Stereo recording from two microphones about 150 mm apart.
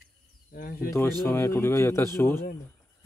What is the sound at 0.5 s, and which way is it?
Speech, 80° left.